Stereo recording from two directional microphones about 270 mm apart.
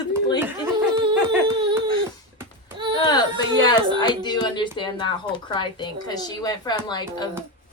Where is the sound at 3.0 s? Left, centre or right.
Centre.